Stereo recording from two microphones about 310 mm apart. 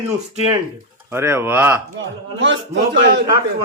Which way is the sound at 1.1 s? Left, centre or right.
Centre.